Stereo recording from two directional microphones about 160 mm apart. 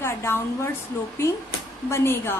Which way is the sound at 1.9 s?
15° left (ahead or behind).